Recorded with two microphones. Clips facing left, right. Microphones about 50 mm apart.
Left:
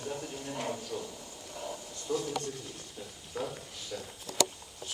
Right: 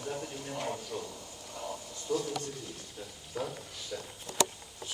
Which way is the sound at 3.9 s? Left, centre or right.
Centre.